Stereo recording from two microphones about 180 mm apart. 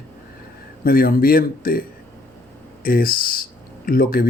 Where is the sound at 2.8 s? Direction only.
55° left (ahead or behind).